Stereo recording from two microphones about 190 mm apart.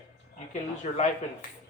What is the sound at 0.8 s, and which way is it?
Speech, 40° left (ahead or behind).